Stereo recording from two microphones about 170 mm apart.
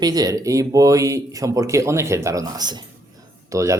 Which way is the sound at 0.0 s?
20° right (ahead or behind).